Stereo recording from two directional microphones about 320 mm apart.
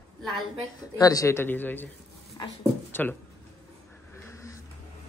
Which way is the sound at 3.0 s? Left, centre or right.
Centre.